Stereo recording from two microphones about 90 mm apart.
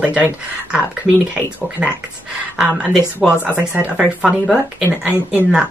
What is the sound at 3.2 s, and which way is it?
Speech, centre (ahead or behind).